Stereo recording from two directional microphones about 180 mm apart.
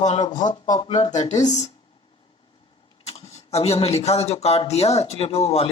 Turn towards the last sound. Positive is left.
turn(degrees=35)  # may be behind; listen again after turning